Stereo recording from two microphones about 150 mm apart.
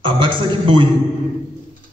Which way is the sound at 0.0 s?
35° right (ahead or behind).